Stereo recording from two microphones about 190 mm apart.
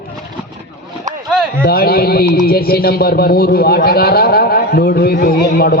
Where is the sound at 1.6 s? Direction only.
55° left (ahead or behind).